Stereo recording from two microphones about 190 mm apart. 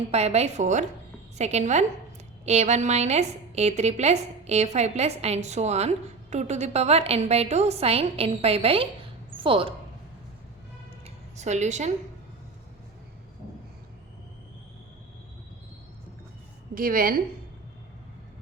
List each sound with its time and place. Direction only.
0.1 s a woman's voice: 35° right (ahead or behind)
11.0 s a sound: 35° right (ahead or behind)
16.7 s a woman's voice: 50° right (ahead or behind)